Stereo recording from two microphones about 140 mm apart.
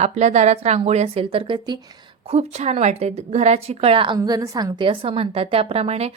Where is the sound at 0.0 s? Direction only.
55° right (ahead or behind); by 1.8 s 30° right (ahead or behind).